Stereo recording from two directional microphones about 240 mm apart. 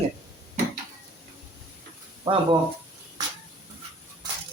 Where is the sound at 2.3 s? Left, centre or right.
Right.